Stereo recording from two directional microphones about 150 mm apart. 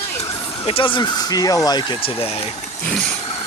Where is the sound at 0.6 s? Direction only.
35° left (ahead or behind).